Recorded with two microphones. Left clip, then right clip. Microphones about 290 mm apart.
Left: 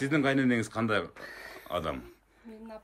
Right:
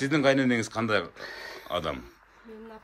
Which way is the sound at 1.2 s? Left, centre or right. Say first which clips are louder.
Right 4 dB; centre.